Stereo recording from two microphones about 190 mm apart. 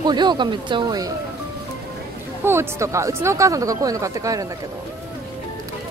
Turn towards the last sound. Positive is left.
turn(degrees=-15)  # may be behind; listen again after turning